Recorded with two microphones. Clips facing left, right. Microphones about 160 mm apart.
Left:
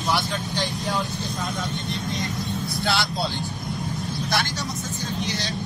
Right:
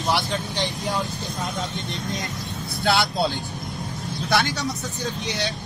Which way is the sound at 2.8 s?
50° right (ahead or behind).